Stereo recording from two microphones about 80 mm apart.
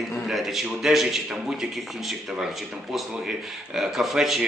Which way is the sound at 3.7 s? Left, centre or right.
Centre.